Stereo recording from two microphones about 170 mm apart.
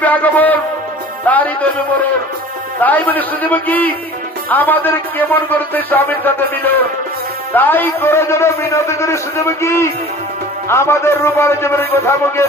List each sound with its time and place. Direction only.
0.0 s music: 10° left (ahead or behind)
1.2 s a man's voice: 10° left (ahead or behind)